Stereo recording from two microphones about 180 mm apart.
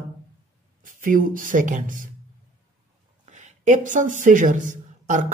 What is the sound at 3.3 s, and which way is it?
Speech, 40° right (ahead or behind).